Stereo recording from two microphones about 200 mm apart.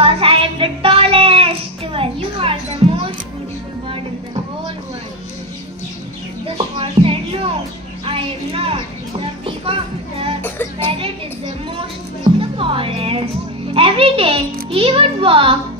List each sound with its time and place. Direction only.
0.0 s music: 25° right (ahead or behind)
6.4 s music: 25° right (ahead or behind)
8.0 s a sound: 30° right (ahead or behind)
9.7 s music: 30° right (ahead or behind)
10.4 s music: 10° left (ahead or behind)
10.9 s a sound: 25° right (ahead or behind)
12.4 s music: 25° right (ahead or behind)
13.7 s a child's voice: 30° right (ahead or behind)